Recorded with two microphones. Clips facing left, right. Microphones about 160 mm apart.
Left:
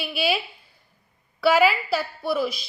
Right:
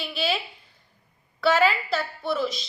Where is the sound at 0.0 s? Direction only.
10° left (ahead or behind).